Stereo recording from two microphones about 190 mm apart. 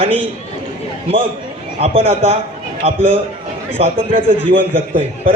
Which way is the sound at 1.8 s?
35° right (ahead or behind).